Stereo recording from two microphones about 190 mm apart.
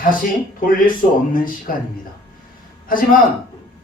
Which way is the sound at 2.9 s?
45° left (ahead or behind).